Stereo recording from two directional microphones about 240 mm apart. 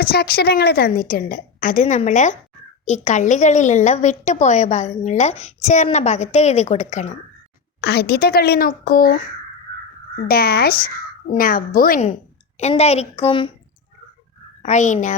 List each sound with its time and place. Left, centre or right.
0.0 s a woman's voice: left
7.8 s a woman's voice: left
10.2 s a woman's voice: left
14.6 s a woman's voice: left